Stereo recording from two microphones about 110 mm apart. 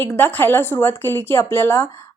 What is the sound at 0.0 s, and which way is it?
A woman's voice, 15° left (ahead or behind).